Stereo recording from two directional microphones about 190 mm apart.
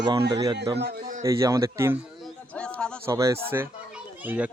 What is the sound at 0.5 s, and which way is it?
Speech, 60° right (ahead or behind).